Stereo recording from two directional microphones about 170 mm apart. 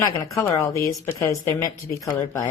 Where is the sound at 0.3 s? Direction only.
15° left (ahead or behind).